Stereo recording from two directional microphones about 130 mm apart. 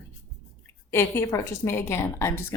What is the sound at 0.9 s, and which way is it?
A woman's voice, 20° left (ahead or behind).